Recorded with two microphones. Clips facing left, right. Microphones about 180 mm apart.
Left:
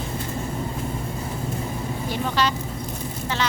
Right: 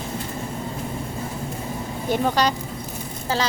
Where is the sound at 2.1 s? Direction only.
45° right (ahead or behind).